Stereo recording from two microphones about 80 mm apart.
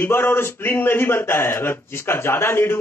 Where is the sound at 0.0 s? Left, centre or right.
Left.